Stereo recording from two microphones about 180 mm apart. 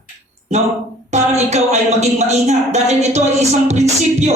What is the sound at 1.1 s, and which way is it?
Speech, 40° right (ahead or behind).